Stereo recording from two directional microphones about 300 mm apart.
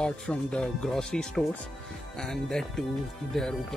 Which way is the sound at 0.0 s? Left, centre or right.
Centre.